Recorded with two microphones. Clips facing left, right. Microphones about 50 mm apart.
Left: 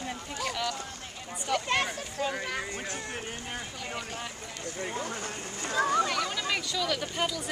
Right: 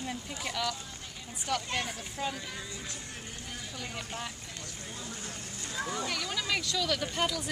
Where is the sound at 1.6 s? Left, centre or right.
Left.